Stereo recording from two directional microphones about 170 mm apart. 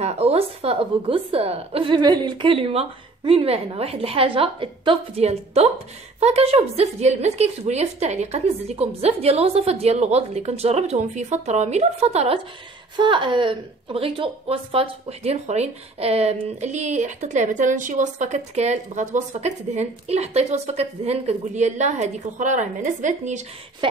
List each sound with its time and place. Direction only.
0.0 s a woman's voice: 40° right (ahead or behind)
12.9 s a woman's voice: 30° right (ahead or behind); by 23.4 s 45° right (ahead or behind)
23.8 s a sound: 30° right (ahead or behind)